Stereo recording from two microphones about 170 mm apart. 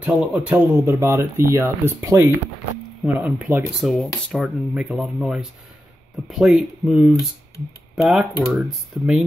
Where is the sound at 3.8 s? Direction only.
Centre (ahead or behind).